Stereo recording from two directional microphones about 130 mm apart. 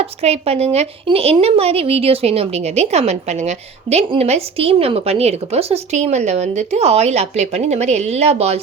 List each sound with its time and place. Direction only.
0.0 s a woman's voice: 50° right (ahead or behind)